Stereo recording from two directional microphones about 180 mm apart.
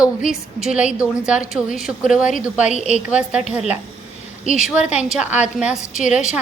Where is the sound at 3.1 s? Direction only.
5° right (ahead or behind).